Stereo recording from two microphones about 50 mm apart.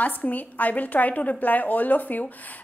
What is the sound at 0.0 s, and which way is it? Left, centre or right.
A woman's voice, left.